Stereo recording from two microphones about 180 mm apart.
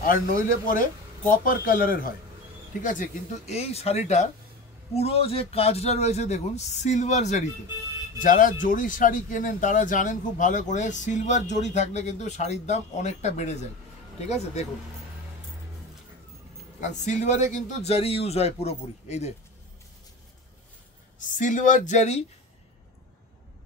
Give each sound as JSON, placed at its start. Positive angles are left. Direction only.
{"t": 0.0, "sound": "speech", "side_deg": 50}
{"t": 17.0, "sound": "speech", "side_deg": 40}
{"t": 21.2, "sound": "speech", "side_deg": 45}